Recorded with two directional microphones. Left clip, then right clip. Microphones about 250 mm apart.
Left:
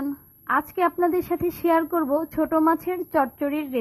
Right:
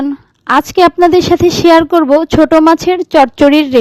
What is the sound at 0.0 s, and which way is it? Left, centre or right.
A woman's voice, right.